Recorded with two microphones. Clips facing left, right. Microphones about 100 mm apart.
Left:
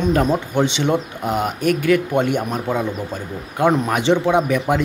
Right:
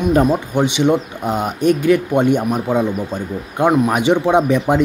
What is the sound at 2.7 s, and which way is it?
Speech, 20° right (ahead or behind).